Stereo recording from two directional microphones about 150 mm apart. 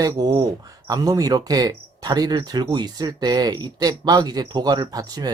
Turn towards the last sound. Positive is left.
turn(degrees=-25)  # may be behind; listen again after turning